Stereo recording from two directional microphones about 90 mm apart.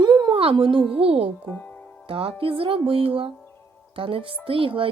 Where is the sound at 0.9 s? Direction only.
90° right.